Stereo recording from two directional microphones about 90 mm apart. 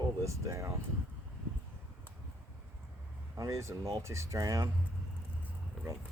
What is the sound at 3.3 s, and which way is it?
Speech, 35° right (ahead or behind).